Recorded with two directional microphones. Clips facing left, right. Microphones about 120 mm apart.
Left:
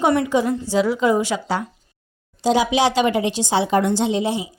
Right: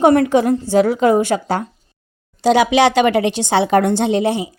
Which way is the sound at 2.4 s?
70° right (ahead or behind).